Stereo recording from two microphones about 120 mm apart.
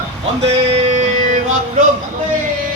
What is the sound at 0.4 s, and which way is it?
Music, 70° right (ahead or behind).